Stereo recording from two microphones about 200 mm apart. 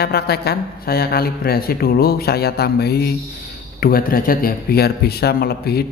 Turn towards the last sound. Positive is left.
turn(degrees=50)  # may be behind; listen again after turning